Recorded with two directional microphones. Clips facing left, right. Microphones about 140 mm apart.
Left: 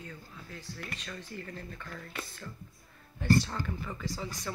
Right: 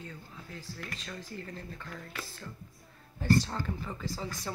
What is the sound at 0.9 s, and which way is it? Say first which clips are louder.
Speech: even; 25° right (ahead or behind).